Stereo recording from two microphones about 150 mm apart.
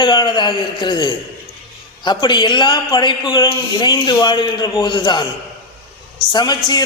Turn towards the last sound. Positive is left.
turn(degrees=25)  # may be behind; listen again after turning